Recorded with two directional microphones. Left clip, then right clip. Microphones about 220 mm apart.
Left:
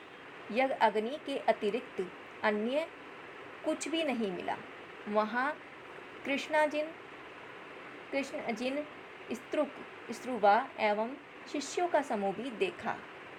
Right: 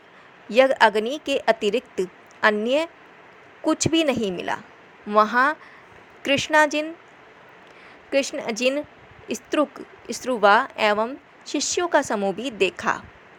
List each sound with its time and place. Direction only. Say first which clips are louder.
0.5 s a woman's voice: right 12 dB; 30° right (ahead or behind)
8.1 s a woman's voice: right 12 dB; 30° right (ahead or behind)